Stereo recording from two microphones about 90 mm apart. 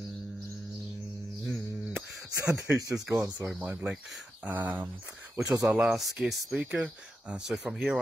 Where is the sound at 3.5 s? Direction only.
20° right (ahead or behind).